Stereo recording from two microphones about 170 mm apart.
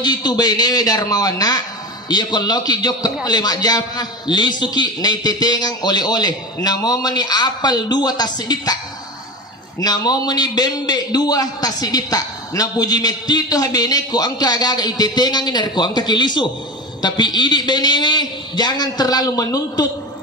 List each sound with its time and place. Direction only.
0.0 s a man's voice: 25° left (ahead or behind)
9.8 s a man's voice: 20° left (ahead or behind)